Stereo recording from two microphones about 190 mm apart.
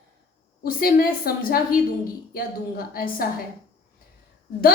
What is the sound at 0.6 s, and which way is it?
A woman's voice, 50° left (ahead or behind).